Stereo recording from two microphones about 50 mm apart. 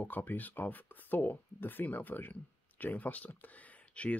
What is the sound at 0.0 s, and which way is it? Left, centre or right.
Speech, left.